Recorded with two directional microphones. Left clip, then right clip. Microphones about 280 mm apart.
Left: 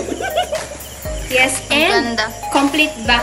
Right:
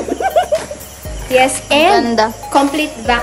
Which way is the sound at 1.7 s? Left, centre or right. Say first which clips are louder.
Right 7 dB; right.